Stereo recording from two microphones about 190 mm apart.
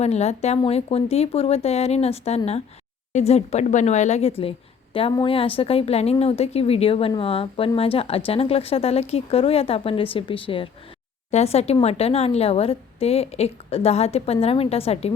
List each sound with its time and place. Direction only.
0.0 s a woman's voice: 35° left (ahead or behind)